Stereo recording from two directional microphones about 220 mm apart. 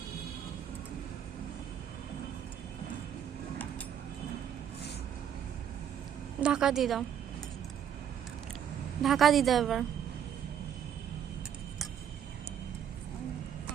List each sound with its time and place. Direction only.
6.4 s a woman's voice: 5° right (ahead or behind)
9.0 s a woman's voice: centre (ahead or behind)